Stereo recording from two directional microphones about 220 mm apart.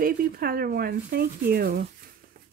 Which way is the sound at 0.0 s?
40° right (ahead or behind).